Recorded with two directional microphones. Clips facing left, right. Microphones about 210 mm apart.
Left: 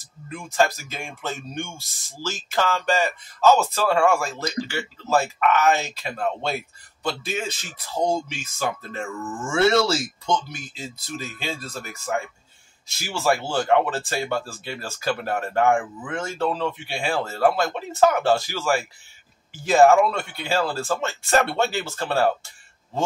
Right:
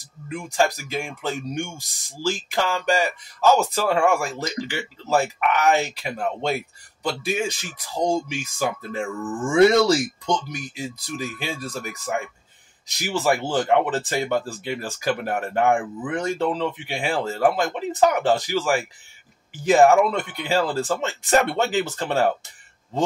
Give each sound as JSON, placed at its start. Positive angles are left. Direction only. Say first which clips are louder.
{"t": 0.0, "sound": "speech", "louder": "right 4 dB", "side_deg": -15}